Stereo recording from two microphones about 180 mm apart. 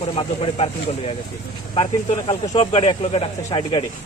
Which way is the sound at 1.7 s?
30° left (ahead or behind).